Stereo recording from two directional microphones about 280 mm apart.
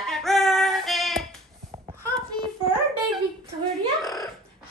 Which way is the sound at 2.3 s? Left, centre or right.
Centre.